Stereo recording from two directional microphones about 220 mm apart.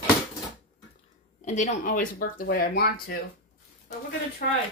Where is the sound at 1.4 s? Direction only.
35° left (ahead or behind).